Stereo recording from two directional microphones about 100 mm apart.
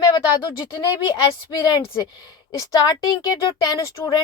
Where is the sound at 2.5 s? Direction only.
35° left (ahead or behind).